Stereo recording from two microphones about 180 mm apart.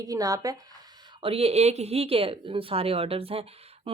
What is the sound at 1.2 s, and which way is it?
Speech, 35° right (ahead or behind).